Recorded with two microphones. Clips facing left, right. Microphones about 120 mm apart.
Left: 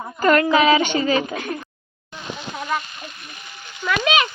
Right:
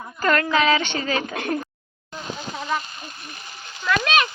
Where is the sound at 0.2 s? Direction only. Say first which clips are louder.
Left 4 dB; 10° left (ahead or behind).